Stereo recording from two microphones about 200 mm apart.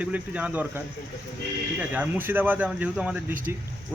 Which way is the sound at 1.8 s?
10° right (ahead or behind).